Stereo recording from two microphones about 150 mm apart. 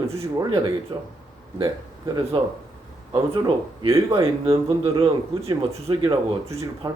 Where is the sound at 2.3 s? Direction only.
35° right (ahead or behind).